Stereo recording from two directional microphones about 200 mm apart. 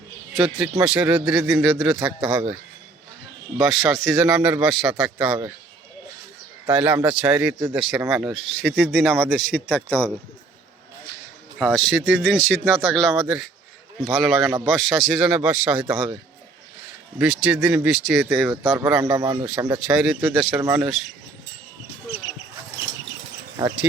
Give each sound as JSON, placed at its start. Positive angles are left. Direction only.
{"t": 0.3, "sound": "speech", "side_deg": 0}
{"t": 3.6, "sound": "speech", "side_deg": 0}
{"t": 6.7, "sound": "speech", "side_deg": -10}
{"t": 11.6, "sound": "speech", "side_deg": 5}
{"t": 15.9, "sound": "speech", "side_deg": -10}
{"t": 17.2, "sound": "speech", "side_deg": -5}
{"t": 18.6, "sound": "speech", "side_deg": -10}
{"t": 19.9, "sound": "speech", "side_deg": -5}
{"t": 23.6, "sound": "speech", "side_deg": -15}